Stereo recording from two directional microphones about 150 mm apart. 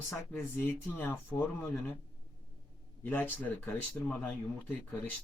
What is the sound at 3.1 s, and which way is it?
Speech, 10° left (ahead or behind).